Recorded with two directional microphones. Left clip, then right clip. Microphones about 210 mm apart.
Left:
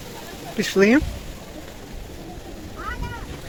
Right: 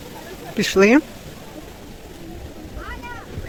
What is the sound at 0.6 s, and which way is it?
Speech, 30° right (ahead or behind).